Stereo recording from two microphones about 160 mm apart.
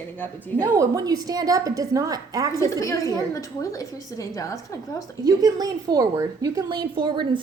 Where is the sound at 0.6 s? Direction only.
20° right (ahead or behind).